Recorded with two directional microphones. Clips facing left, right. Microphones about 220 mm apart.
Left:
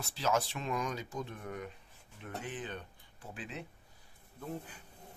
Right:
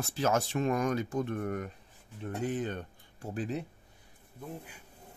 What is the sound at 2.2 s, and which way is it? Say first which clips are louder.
Speech: right 8 dB; 40° right (ahead or behind).